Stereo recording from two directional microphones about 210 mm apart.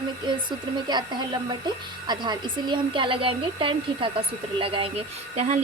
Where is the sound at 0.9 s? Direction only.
20° right (ahead or behind).